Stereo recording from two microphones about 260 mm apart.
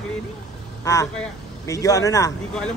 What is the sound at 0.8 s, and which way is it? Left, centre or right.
A man's voice, centre.